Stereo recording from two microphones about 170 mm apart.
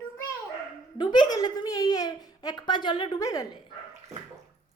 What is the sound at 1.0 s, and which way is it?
A woman's voice, 25° left (ahead or behind).